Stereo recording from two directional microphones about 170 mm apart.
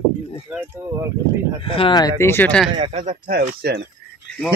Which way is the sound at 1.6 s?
30° left (ahead or behind).